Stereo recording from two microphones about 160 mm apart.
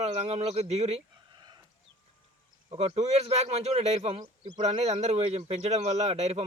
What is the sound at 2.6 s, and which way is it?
A man's voice, 40° right (ahead or behind).